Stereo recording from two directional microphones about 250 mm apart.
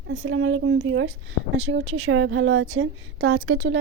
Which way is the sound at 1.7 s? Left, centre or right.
Right.